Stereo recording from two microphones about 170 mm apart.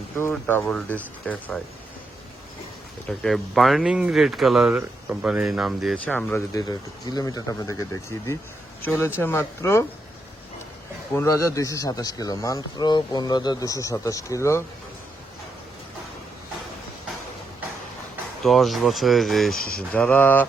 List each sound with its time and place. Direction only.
0.2 s speech: 10° left (ahead or behind)
3.1 s speech: centre (ahead or behind)
6.1 s speech: 10° left (ahead or behind)
6.5 s speech: 20° left (ahead or behind)
8.9 s speech: 15° left (ahead or behind)
11.1 s speech: 15° left (ahead or behind)
18.4 s speech: centre (ahead or behind)